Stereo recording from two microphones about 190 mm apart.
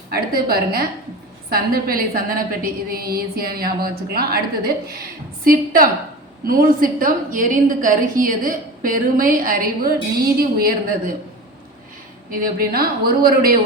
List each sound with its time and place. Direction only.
0.1 s a woman's voice: 50° right (ahead or behind)
12.3 s a woman's voice: 50° right (ahead or behind)